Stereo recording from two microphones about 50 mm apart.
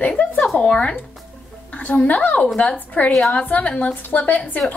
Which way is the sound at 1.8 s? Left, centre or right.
Left.